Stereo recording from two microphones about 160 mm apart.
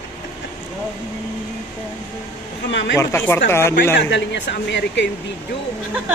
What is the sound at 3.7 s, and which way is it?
A man's voice, 90° left.